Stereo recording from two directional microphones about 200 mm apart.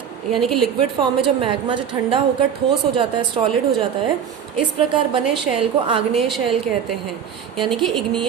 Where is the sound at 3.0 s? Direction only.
25° right (ahead or behind).